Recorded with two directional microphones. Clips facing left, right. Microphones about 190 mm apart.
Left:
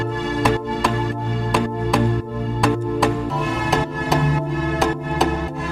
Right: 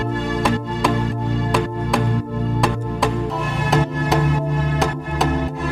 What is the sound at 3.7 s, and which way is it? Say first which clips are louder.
Music: right 3 dB; centre (ahead or behind).